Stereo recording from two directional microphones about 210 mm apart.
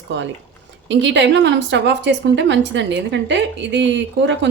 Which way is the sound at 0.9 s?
60° right (ahead or behind).